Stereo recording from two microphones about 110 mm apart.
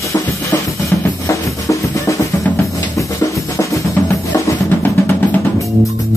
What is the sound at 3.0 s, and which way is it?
Drum, 30° left (ahead or behind).